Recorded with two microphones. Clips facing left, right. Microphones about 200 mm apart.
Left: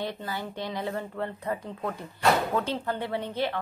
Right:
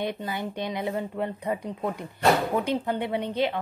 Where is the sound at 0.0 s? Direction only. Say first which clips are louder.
Right 3 dB; 15° right (ahead or behind).